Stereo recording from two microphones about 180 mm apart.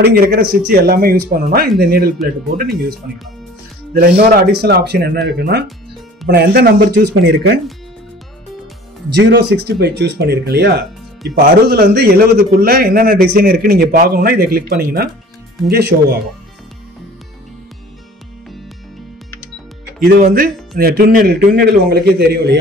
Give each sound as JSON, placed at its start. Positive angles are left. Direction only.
{"t": 0.0, "sound": "speech", "side_deg": -60}
{"t": 3.9, "sound": "speech", "side_deg": -55}
{"t": 9.1, "sound": "speech", "side_deg": -70}
{"t": 20.0, "sound": "speech", "side_deg": -55}